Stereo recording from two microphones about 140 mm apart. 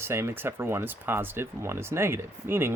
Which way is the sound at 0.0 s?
20° right (ahead or behind).